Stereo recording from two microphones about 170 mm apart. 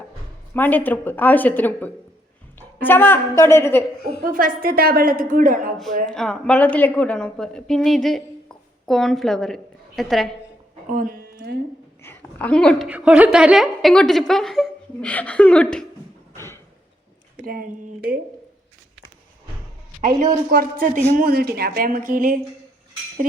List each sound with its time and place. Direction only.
0.5 s speech: 10° left (ahead or behind)
4.2 s a woman's voice: 55° right (ahead or behind)
6.1 s a woman's voice: 5° left (ahead or behind)
10.9 s a sound: 55° right (ahead or behind)
12.0 s a woman's voice: 10° left (ahead or behind)
12.9 s a woman's voice: 5° right (ahead or behind)
17.4 s a woman's voice: 60° right (ahead or behind)
20.0 s a man's voice: 50° right (ahead or behind)